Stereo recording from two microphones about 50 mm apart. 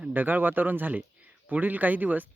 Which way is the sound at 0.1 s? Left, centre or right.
Right.